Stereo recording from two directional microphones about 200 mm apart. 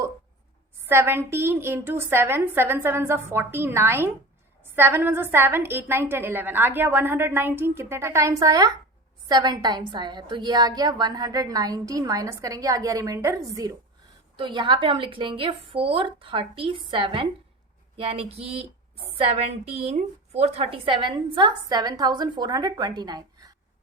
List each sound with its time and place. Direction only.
0.9 s a woman's voice: 10° right (ahead or behind)